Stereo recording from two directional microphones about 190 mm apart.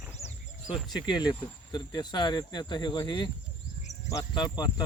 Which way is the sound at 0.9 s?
20° left (ahead or behind).